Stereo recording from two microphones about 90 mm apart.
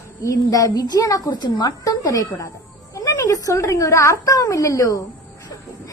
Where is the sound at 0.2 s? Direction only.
40° left (ahead or behind).